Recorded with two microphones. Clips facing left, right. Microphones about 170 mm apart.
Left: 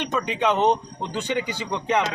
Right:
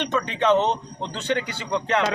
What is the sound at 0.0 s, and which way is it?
Speech, 10° left (ahead or behind).